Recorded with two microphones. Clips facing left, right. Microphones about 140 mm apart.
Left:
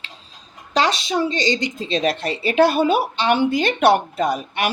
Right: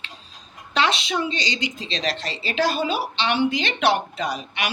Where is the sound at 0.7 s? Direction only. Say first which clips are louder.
Left 3 dB; 40° left (ahead or behind).